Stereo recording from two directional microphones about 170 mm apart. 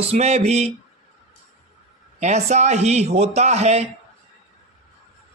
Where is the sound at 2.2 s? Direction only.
45° right (ahead or behind).